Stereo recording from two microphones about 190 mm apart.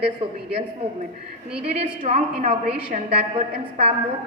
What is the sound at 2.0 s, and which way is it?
Speech, 35° right (ahead or behind).